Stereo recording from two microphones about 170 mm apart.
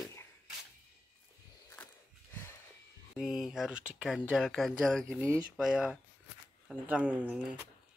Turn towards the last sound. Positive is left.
turn(degrees=-10)  # may be behind; listen again after turning